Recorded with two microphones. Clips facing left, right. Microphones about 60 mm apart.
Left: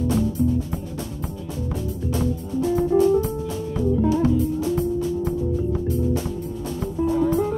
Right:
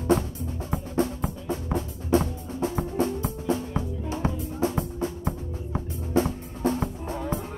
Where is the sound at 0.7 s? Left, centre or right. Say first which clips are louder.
Right 4 dB; right.